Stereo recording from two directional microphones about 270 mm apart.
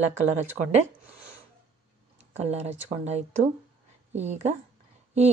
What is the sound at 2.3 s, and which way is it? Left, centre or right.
A woman's voice, right.